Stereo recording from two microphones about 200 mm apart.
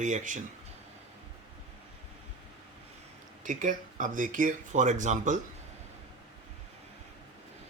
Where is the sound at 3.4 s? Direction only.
40° right (ahead or behind).